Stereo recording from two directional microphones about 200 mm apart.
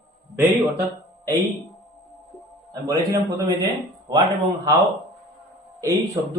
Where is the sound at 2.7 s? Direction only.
20° right (ahead or behind).